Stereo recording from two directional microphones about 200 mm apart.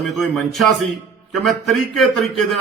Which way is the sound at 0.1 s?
Centre (ahead or behind).